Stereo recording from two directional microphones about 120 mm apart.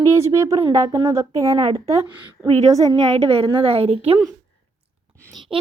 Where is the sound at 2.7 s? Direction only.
30° right (ahead or behind).